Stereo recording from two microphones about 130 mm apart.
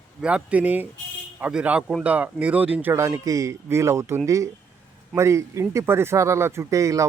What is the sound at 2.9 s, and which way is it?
Speech, 20° right (ahead or behind).